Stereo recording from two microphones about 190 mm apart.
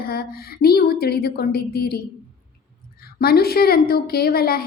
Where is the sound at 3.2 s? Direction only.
55° left (ahead or behind).